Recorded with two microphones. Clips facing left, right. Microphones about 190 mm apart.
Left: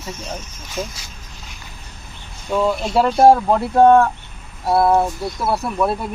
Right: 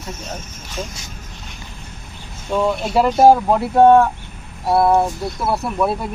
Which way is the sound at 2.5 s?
Centre (ahead or behind).